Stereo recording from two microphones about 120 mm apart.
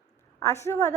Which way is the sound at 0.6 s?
25° left (ahead or behind).